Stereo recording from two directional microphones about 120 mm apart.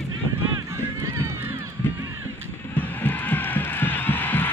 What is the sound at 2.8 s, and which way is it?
Music, 15° left (ahead or behind).